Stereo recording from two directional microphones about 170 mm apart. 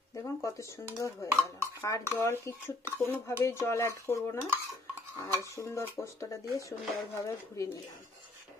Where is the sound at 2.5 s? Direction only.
20° left (ahead or behind).